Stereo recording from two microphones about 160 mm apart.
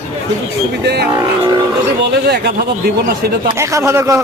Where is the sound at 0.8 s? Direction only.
90° right.